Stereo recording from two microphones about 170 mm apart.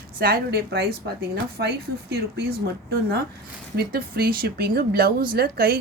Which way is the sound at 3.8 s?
65° right (ahead or behind).